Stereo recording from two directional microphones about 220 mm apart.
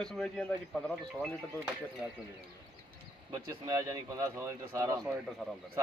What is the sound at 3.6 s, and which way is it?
A man's voice, 15° right (ahead or behind).